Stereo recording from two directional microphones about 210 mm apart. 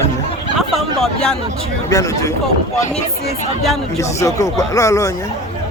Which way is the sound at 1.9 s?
15° left (ahead or behind).